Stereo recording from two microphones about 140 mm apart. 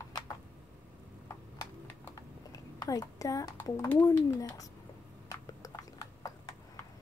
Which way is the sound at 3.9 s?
20° left (ahead or behind).